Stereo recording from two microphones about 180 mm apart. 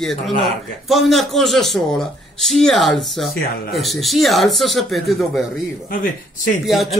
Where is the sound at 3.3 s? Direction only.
55° left (ahead or behind).